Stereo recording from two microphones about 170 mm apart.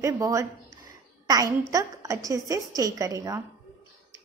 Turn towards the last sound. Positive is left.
turn(degrees=-20)  # may be behind; listen again after turning